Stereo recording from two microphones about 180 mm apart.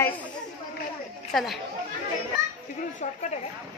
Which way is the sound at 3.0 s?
40° left (ahead or behind).